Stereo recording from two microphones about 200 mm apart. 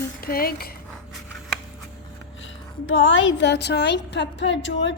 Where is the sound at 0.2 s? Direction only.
45° left (ahead or behind).